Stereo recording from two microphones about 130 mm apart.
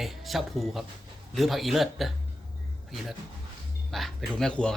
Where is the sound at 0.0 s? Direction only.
Centre (ahead or behind).